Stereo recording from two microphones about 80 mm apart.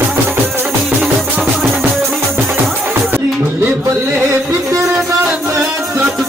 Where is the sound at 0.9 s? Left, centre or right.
Centre.